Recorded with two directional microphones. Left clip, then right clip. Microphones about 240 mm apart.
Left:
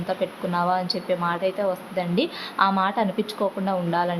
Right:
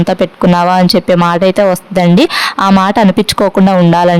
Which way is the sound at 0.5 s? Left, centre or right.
Right.